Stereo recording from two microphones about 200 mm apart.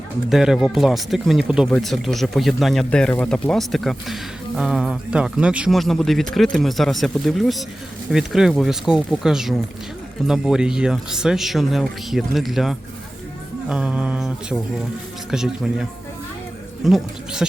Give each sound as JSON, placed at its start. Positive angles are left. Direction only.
{"t": 0.3, "sound": "speech", "side_deg": 0}